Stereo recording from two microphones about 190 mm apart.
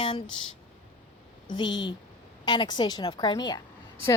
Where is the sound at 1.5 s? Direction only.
25° left (ahead or behind).